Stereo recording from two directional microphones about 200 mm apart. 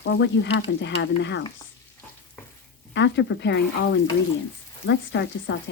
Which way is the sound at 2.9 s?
60° left (ahead or behind).